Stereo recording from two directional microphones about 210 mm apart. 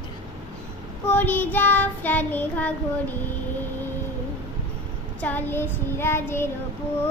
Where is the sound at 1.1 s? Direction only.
10° left (ahead or behind).